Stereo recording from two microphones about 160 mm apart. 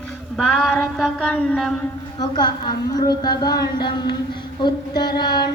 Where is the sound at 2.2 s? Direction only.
25° left (ahead or behind).